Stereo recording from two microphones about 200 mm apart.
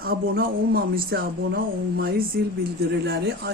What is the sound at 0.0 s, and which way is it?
Speech, 50° right (ahead or behind).